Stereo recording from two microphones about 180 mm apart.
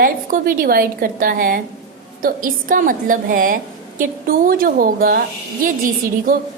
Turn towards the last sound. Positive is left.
turn(degrees=-50)  # may be behind; listen again after turning